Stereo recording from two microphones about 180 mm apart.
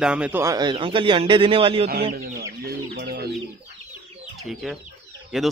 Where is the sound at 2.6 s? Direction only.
60° right (ahead or behind).